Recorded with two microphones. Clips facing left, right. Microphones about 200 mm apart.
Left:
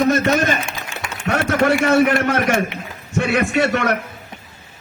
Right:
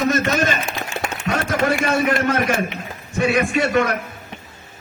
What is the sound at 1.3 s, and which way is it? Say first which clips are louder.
A man's voice: left 4 dB; 70° left (ahead or behind).